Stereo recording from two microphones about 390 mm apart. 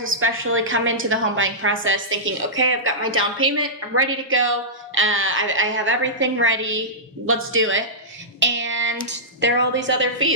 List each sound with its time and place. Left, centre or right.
0.0 s a woman's voice: right